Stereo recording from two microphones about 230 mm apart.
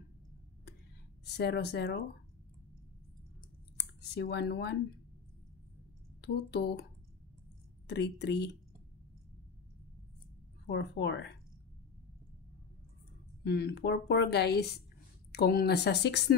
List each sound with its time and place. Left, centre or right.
1.2 s a woman's voice: left
3.7 s speech: left
6.2 s a woman's voice: left
10.7 s a woman's voice: left
13.4 s a woman's voice: left